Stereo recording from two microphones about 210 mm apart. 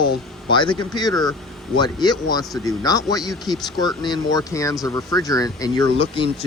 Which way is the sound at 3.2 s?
Centre (ahead or behind).